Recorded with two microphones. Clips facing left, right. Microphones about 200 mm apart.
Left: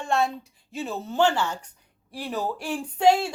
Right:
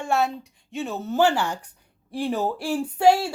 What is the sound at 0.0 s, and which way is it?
A woman's voice, 5° right (ahead or behind).